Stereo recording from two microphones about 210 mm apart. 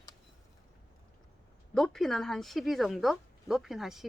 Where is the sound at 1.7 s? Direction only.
Centre (ahead or behind).